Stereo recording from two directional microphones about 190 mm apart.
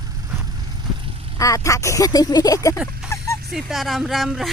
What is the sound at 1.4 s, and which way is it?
Speech, 15° left (ahead or behind).